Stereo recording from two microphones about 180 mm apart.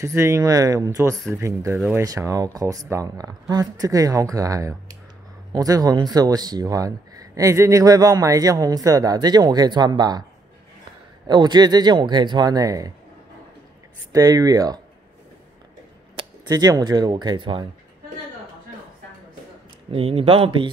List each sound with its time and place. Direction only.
0.0 s speech: 15° right (ahead or behind)
11.2 s speech: 25° right (ahead or behind)
14.1 s speech: 20° right (ahead or behind)
16.4 s speech: 20° right (ahead or behind)
19.9 s speech: 35° right (ahead or behind)